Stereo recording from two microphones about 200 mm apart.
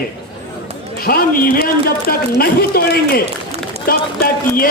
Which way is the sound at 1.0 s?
45° left (ahead or behind).